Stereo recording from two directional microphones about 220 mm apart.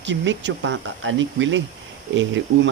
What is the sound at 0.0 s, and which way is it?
Speech, 55° right (ahead or behind).